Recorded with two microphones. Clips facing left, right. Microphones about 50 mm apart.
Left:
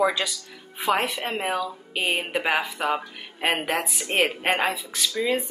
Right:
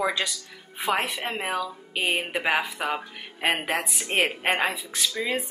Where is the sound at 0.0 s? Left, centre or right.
Centre.